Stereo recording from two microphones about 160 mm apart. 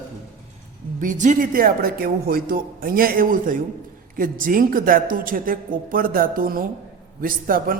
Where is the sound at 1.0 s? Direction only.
50° right (ahead or behind).